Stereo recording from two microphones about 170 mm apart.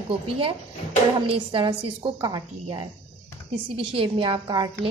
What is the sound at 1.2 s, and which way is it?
A woman's voice, 30° right (ahead or behind).